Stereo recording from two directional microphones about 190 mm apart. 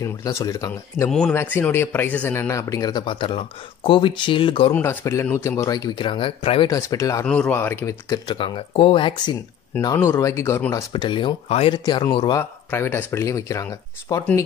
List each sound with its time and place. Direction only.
0.0 s speech: 15° left (ahead or behind)
4.7 s speech: 15° left (ahead or behind)
6.7 s speech: 15° left (ahead or behind)
7.2 s speech: 5° left (ahead or behind); by 12.4 s 25° left (ahead or behind)
12.4 s speech: 10° left (ahead or behind)